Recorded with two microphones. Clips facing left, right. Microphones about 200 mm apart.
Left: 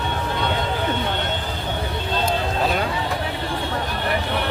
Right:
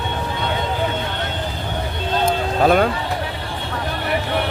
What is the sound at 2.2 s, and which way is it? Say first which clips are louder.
Music: right 7 dB; 55° right (ahead or behind).